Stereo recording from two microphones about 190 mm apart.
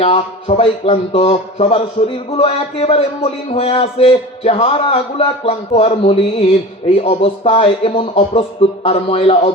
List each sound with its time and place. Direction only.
0.0 s speech: 30° left (ahead or behind)